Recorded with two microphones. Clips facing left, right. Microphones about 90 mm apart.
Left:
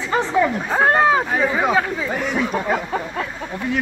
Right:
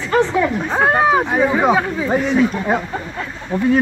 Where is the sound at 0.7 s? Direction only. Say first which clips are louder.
Right 1 dB; 5° right (ahead or behind).